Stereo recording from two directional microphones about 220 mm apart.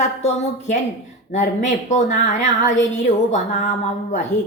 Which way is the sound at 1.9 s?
35° left (ahead or behind).